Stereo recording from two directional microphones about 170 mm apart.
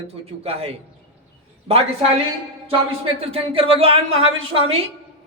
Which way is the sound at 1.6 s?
35° right (ahead or behind).